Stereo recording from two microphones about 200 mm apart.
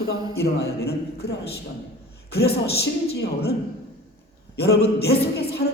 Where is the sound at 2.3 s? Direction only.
55° left (ahead or behind).